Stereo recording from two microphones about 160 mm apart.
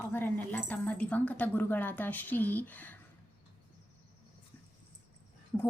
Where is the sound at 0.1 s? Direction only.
10° left (ahead or behind).